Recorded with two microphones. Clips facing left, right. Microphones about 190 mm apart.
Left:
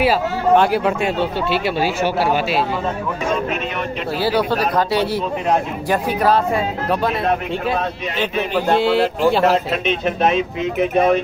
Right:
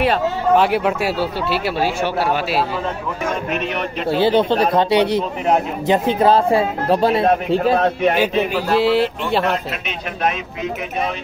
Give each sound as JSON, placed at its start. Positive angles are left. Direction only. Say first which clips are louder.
{"t": 0.0, "sound": "speech", "louder": "left 1 dB", "side_deg": 0}
{"t": 4.1, "sound": "speech", "louder": "right 4 dB", "side_deg": -25}
{"t": 7.8, "sound": "speech", "louder": "right 8 dB", "side_deg": -55}
{"t": 8.2, "sound": "speech", "louder": "right 2 dB", "side_deg": -10}
{"t": 9.8, "sound": "speech", "louder": "left 4 dB", "side_deg": 25}